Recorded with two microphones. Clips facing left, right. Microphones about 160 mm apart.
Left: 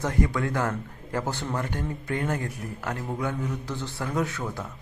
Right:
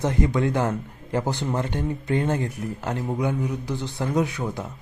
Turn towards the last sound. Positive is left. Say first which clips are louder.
# right 4 dB
turn(degrees=-15)  # may be behind; listen again after turning